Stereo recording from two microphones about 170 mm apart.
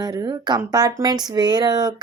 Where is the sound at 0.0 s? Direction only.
25° right (ahead or behind).